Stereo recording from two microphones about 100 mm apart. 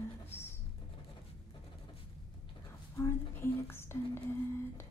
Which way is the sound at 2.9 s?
25° left (ahead or behind).